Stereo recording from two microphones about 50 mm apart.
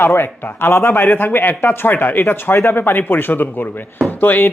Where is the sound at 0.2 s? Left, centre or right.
Left.